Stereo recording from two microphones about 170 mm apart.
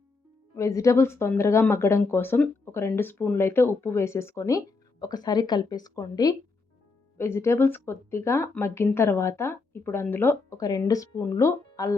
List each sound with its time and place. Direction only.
0.5 s speech: 20° left (ahead or behind)